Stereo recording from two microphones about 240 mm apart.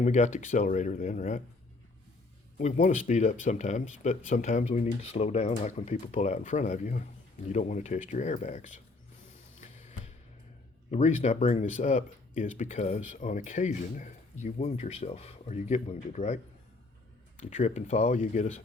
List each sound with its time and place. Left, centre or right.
0.0 s speech: left
2.6 s speech: left
9.6 s music: left
10.9 s speech: left